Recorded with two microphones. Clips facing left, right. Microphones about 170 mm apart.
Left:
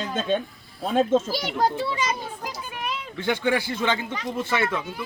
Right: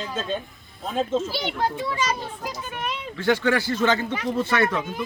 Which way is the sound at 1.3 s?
40° left (ahead or behind).